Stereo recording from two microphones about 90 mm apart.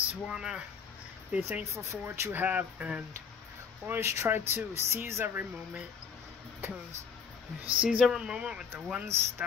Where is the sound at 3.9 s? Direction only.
30° right (ahead or behind).